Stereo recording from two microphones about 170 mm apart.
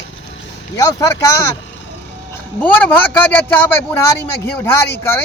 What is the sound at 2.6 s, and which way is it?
Speech, 10° left (ahead or behind).